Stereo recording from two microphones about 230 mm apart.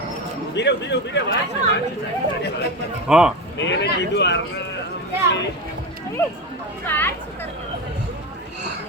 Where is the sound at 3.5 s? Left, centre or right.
Left.